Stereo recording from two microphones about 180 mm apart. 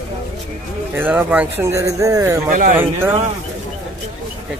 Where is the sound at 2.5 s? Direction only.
45° right (ahead or behind).